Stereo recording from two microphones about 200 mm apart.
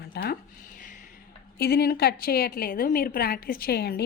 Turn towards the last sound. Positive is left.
turn(degrees=50)  # may be behind; listen again after turning